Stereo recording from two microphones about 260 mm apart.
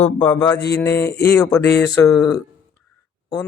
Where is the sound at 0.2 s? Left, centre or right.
Centre.